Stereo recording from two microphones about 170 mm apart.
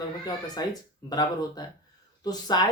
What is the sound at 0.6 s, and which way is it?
Speech, 20° left (ahead or behind).